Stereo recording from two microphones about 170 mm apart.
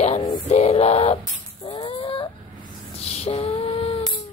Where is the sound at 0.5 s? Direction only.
40° left (ahead or behind).